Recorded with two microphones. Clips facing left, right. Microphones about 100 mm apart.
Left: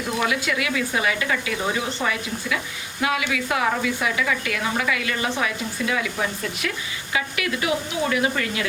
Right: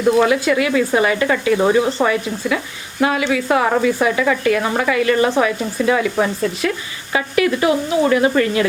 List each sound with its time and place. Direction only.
0.2 s speech: 35° right (ahead or behind)